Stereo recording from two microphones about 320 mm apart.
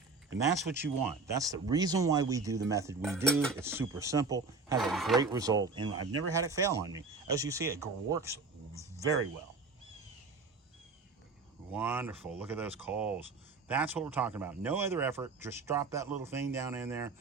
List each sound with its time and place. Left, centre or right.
0.9 s speech: right
1.3 s speech: centre
3.0 s speech: centre
4.8 s speech: centre
5.1 s speech: centre
8.7 s a sound: centre
11.7 s speech: centre